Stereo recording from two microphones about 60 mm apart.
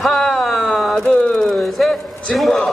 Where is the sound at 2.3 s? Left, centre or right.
Centre.